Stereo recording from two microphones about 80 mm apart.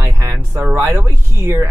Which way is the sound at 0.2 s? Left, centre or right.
Right.